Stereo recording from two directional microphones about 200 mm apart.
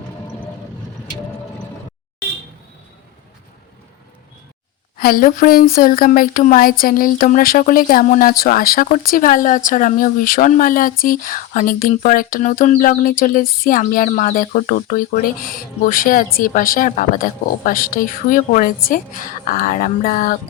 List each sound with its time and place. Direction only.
4.9 s a woman's voice: 45° left (ahead or behind)